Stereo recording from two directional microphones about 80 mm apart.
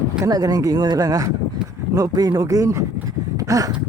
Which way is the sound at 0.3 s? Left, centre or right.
Right.